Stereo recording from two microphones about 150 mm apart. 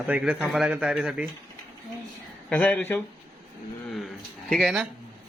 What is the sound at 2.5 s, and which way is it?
Speech, 5° left (ahead or behind).